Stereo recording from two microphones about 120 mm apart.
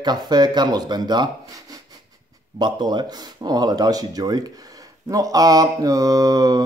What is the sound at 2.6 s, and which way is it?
Mantra, 35° right (ahead or behind).